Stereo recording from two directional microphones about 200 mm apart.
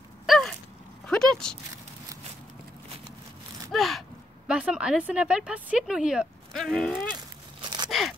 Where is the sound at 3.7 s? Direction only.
Centre (ahead or behind).